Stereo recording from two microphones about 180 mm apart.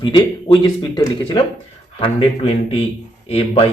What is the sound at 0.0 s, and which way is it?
A man's voice, 25° left (ahead or behind).